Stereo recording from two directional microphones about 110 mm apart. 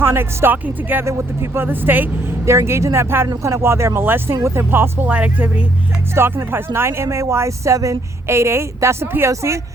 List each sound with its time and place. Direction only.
0.0 s a woman's voice: 20° right (ahead or behind)